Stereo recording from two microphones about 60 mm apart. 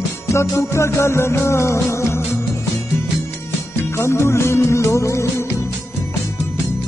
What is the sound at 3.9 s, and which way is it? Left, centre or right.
Music, left.